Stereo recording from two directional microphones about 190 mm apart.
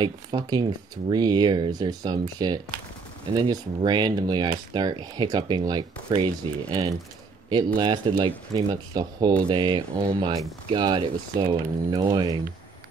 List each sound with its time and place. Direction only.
0.0 s speech: 25° right (ahead or behind)
7.4 s speech: 25° right (ahead or behind)